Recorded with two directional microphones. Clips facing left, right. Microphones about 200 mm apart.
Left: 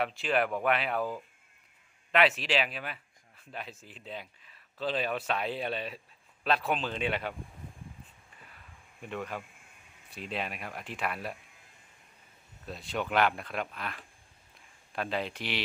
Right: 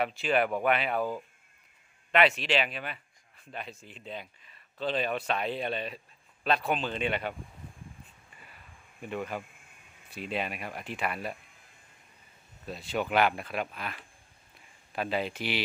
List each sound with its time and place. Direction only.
0.0 s speech: centre (ahead or behind)
9.0 s speech: centre (ahead or behind)
12.6 s speech: centre (ahead or behind)